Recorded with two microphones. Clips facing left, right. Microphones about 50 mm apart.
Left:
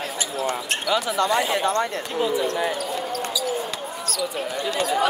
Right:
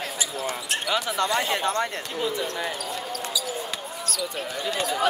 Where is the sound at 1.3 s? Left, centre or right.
Centre.